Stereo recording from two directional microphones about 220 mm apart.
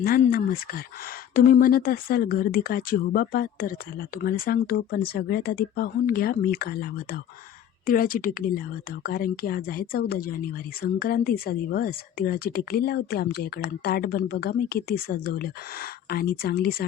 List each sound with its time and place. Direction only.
0.0 s speech: 40° left (ahead or behind)